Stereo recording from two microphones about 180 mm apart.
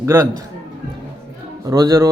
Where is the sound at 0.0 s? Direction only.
15° right (ahead or behind).